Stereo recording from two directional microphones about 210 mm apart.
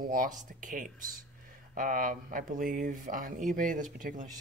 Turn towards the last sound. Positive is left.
turn(degrees=-40)  # may be behind; listen again after turning